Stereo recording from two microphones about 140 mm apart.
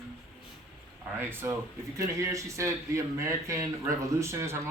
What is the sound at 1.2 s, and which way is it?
Speech, 15° right (ahead or behind).